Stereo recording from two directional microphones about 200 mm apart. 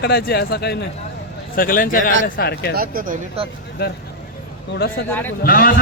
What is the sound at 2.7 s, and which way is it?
Speech, 45° right (ahead or behind).